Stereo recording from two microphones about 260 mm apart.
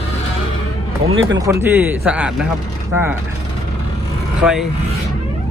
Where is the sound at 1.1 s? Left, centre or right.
Right.